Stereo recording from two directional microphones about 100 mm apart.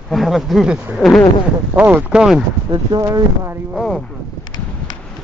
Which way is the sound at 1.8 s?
15° right (ahead or behind).